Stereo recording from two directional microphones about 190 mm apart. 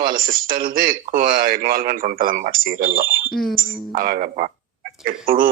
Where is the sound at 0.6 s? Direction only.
50° right (ahead or behind).